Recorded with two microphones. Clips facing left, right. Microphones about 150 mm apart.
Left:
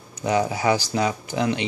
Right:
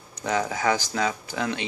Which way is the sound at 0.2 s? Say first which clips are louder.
Left 4 dB; 15° left (ahead or behind).